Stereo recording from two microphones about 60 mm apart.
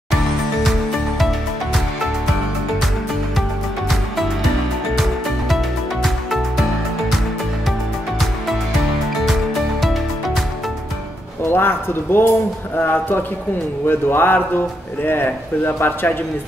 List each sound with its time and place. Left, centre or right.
3.9 s music: centre
6.0 s music: centre
9.2 s music: centre
11.5 s a sound: left
12.7 s speech: left